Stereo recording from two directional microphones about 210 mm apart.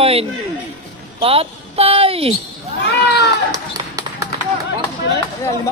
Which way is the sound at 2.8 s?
55° left (ahead or behind).